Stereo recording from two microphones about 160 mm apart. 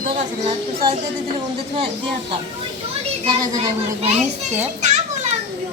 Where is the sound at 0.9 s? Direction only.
35° right (ahead or behind).